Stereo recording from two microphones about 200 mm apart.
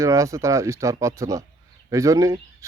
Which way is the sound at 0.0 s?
15° right (ahead or behind).